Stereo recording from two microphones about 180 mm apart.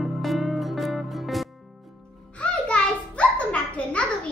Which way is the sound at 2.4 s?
5° left (ahead or behind).